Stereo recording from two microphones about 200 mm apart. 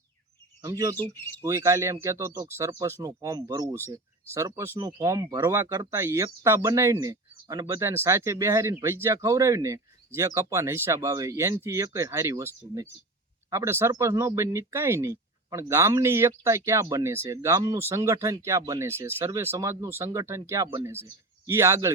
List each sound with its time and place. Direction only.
0.6 s speech: 15° right (ahead or behind)
20.7 s speech: 25° right (ahead or behind)
20.9 s speech: 10° right (ahead or behind)